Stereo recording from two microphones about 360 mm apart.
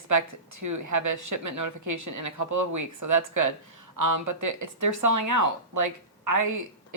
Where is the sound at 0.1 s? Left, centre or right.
Right.